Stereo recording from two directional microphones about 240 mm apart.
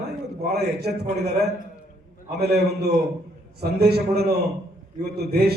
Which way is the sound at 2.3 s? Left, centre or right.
Right.